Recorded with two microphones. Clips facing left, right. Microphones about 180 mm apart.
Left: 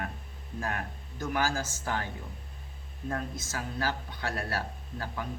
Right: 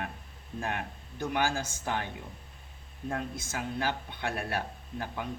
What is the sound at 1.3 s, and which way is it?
Speech, 20° right (ahead or behind).